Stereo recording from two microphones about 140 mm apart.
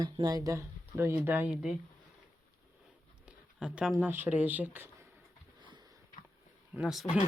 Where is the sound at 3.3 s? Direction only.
5° right (ahead or behind).